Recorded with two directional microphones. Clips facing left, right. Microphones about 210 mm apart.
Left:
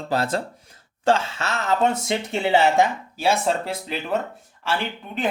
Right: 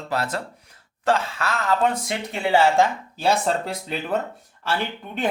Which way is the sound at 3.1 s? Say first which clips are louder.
Even; 5° left (ahead or behind).